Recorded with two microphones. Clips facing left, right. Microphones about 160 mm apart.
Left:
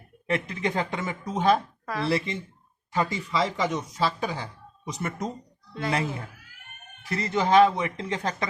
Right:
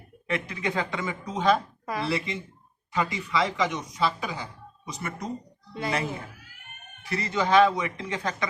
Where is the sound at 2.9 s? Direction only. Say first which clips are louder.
Left 1 dB; 35° left (ahead or behind).